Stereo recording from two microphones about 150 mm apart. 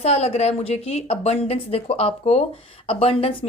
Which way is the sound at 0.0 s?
45° left (ahead or behind).